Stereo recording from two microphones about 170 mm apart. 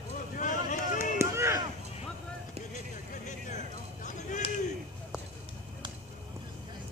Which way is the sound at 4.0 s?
45° left (ahead or behind).